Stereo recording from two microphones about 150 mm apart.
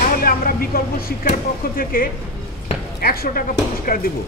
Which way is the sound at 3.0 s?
85° left.